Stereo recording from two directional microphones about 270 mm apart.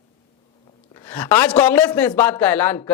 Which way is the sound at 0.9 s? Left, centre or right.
Centre.